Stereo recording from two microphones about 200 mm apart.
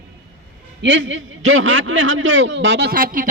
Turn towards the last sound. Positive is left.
turn(degrees=-45)  # may be behind; listen again after turning